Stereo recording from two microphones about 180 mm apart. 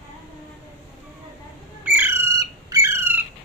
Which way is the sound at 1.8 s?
10° right (ahead or behind).